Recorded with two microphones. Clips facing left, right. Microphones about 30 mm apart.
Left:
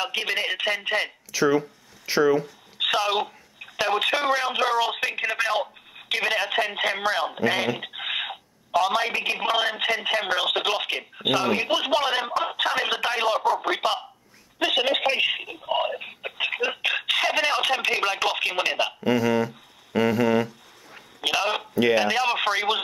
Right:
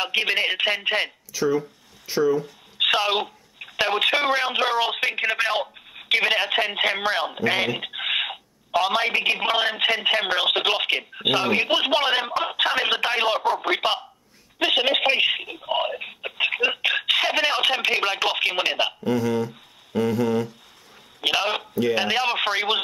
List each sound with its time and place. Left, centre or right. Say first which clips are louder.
0.0 s speech: right 4 dB; right
1.5 s speech: left 1 dB; left
2.8 s speech: right 2 dB; centre
19.0 s speech: left 4 dB; left
21.2 s speech: right 1 dB; centre